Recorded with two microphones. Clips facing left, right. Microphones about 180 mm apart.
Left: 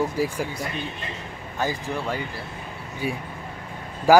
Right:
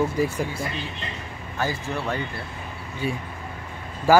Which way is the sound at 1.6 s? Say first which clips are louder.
Even; 15° left (ahead or behind).